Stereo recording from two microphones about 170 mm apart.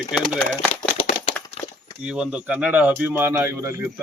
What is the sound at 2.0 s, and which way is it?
Speech, 5° right (ahead or behind).